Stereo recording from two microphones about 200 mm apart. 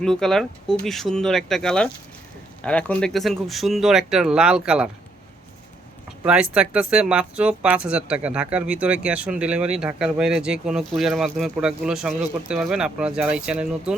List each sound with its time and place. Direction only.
0.0 s speech: 5° left (ahead or behind)
6.2 s speech: 5° right (ahead or behind)